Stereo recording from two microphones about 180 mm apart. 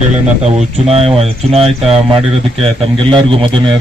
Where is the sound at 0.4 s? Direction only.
35° right (ahead or behind).